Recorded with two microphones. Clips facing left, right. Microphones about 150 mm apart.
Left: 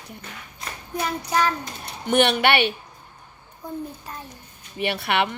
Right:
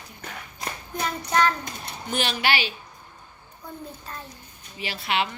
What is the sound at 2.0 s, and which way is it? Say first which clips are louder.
Speech: left 7 dB; 65° left (ahead or behind).